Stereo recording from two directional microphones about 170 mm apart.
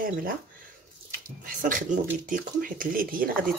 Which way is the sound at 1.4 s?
50° right (ahead or behind).